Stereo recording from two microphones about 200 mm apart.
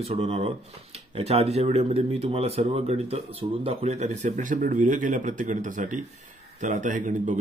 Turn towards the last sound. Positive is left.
turn(degrees=-40)  # may be behind; listen again after turning